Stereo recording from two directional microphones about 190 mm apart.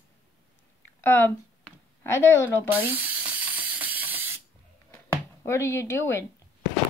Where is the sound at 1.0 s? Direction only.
10° left (ahead or behind).